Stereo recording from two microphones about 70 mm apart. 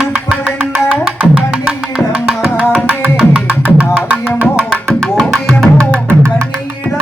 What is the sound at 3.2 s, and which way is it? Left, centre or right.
Music, centre.